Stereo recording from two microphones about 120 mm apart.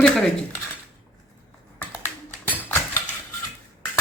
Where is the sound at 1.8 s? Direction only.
20° left (ahead or behind).